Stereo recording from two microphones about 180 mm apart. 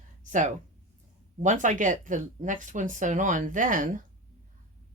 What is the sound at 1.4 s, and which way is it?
Speech, 45° right (ahead or behind).